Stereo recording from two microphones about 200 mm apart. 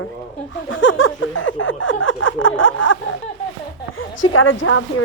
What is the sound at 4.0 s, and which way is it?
Speech, 90° left.